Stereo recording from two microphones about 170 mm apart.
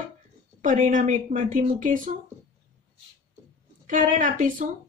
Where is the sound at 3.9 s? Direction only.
50° right (ahead or behind).